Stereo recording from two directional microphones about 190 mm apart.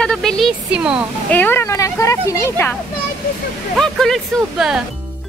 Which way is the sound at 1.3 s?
10° left (ahead or behind).